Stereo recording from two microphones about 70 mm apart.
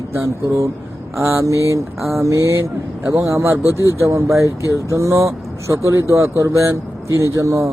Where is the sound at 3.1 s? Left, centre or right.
Right.